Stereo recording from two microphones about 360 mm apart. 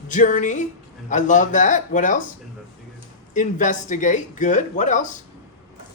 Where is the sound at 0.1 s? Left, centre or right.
Left.